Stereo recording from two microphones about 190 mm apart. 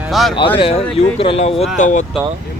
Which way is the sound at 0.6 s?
30° left (ahead or behind).